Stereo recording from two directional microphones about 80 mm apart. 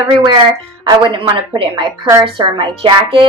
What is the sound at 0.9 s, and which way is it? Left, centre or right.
Speech, right.